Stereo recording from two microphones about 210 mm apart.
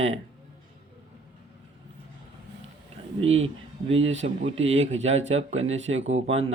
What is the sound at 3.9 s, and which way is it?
Speech, 65° right (ahead or behind).